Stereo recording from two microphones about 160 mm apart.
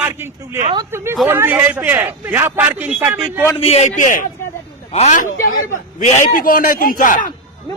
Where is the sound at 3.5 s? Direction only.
40° left (ahead or behind).